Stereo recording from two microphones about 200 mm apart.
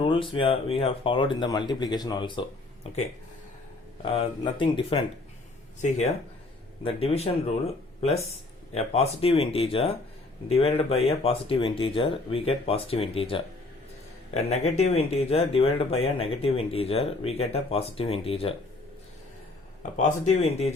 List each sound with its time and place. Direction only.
0.0 s speech: 25° left (ahead or behind)
4.0 s speech: 30° left (ahead or behind)
6.8 s speech: 30° left (ahead or behind)
19.8 s speech: 35° left (ahead or behind)